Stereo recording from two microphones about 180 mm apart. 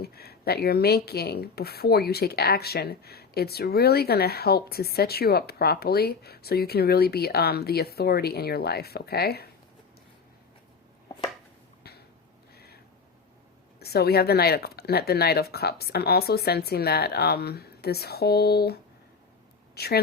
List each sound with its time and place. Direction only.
0.0 s speech: 60° left (ahead or behind)
12.5 s a sound: 60° left (ahead or behind)
13.7 s speech: 60° left (ahead or behind)